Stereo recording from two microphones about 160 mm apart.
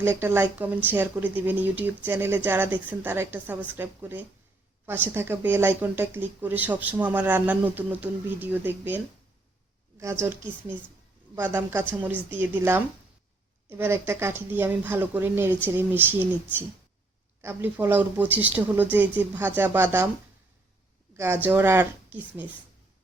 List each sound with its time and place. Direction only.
0.0 s speech: 15° right (ahead or behind)
10.0 s speech: 15° right (ahead or behind)
15.5 s speech: 10° left (ahead or behind)
16.0 s speech: 10° right (ahead or behind)
21.2 s speech: 10° right (ahead or behind)